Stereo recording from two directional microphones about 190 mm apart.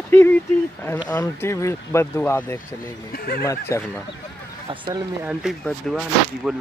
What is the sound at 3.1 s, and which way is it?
Speech, 50° left (ahead or behind).